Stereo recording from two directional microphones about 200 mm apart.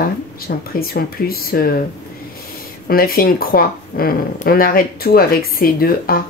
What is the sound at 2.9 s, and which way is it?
Speech, 45° left (ahead or behind).